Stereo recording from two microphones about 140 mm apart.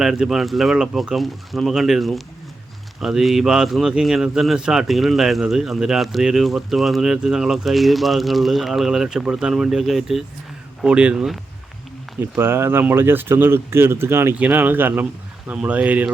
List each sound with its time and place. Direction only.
0.0 s speech: 5° right (ahead or behind)
12.4 s speech: 15° right (ahead or behind)